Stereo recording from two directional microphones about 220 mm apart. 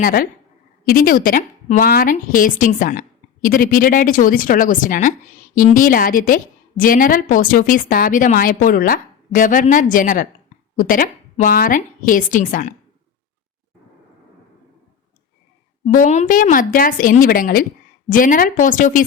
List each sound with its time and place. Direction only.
0.0 s a woman's voice: 40° left (ahead or behind)
15.9 s a woman's voice: 35° left (ahead or behind)